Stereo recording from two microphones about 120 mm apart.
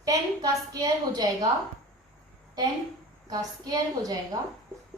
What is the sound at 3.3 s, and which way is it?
Speech, 30° right (ahead or behind).